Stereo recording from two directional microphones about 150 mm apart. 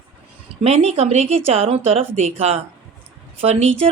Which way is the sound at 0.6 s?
45° right (ahead or behind).